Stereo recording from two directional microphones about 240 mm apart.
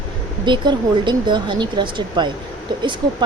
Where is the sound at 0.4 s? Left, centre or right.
Centre.